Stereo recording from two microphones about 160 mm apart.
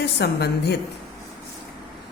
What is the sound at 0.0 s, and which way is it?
Speech, 90° left.